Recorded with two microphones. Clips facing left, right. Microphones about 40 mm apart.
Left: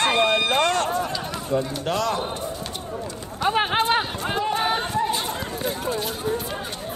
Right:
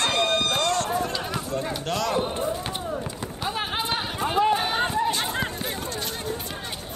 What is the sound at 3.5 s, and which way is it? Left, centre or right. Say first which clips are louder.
Clip-clop: left 8 dB; left.